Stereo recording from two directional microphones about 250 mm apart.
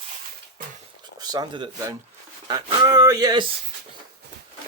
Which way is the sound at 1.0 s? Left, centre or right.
Centre.